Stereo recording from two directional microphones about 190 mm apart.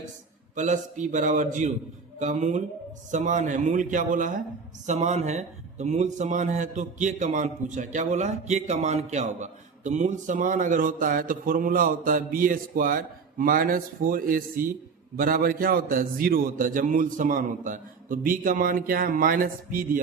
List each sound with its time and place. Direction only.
0.5 s a man's voice: 40° right (ahead or behind)